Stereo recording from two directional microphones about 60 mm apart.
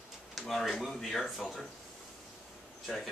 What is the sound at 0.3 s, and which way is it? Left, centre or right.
Speech, centre.